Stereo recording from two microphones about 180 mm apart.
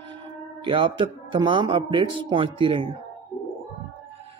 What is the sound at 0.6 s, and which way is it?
A man's voice, 25° right (ahead or behind).